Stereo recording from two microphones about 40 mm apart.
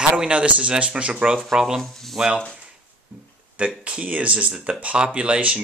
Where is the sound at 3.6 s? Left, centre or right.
Right.